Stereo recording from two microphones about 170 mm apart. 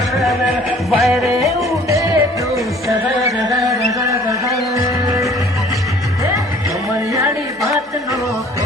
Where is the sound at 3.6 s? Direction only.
20° right (ahead or behind).